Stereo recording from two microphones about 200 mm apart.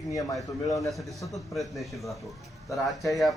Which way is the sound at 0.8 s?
Centre (ahead or behind).